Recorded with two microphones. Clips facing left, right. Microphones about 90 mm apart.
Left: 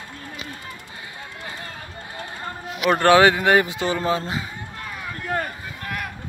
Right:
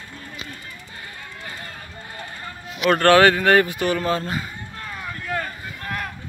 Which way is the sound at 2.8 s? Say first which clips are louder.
Even; 15° left (ahead or behind).